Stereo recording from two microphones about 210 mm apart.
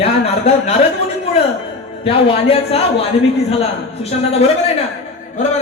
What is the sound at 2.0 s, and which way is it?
Speech, 25° left (ahead or behind).